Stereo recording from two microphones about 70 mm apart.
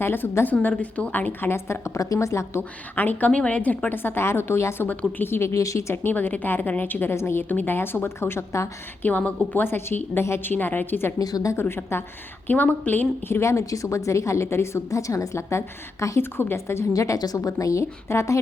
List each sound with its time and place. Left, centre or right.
0.0 s a woman's voice: left
0.5 s a woman's voice: centre; by 2.6 s left
2.9 s a woman's voice: left
4.9 s a woman's voice: left
5.9 s a woman's voice: left
7.4 s a woman's voice: left
9.0 s a woman's voice: left
11.2 s a woman's voice: left
12.5 s a woman's voice: left
16.9 s speech: left